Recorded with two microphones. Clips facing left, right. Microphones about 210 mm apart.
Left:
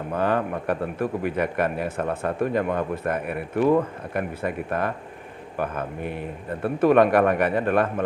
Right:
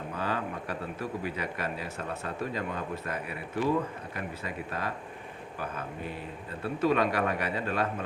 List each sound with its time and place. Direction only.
0.1 s a man's voice: 55° left (ahead or behind)